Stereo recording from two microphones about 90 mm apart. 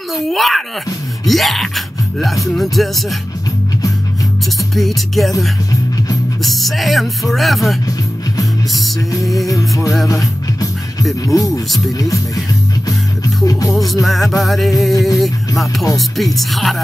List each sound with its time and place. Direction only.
0.3 s music: centre (ahead or behind)
4.7 s music: centre (ahead or behind)
6.4 s music: centre (ahead or behind)
9.2 s music: centre (ahead or behind)
9.5 s music: 40° left (ahead or behind)
13.5 s music: 40° left (ahead or behind)
14.0 s music: centre (ahead or behind)